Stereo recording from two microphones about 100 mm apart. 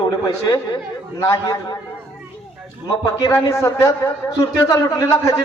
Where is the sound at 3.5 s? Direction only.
35° left (ahead or behind).